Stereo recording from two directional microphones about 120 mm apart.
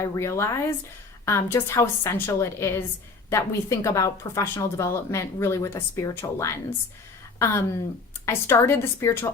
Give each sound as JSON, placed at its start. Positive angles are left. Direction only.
{"t": 0.0, "sound": "speech", "side_deg": 25}